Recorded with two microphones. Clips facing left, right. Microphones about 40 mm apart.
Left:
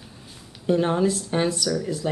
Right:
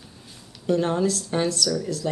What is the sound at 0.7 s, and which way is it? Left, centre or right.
Speech, centre.